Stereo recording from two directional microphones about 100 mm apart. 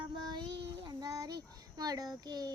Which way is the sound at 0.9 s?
40° right (ahead or behind).